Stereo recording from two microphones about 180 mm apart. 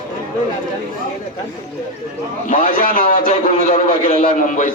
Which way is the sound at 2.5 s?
45° left (ahead or behind).